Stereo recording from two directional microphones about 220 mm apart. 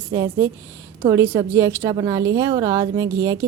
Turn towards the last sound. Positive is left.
turn(degrees=-15)  # may be behind; listen again after turning